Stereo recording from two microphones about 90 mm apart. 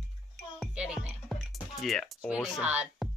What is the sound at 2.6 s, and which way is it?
Speech, 15° right (ahead or behind).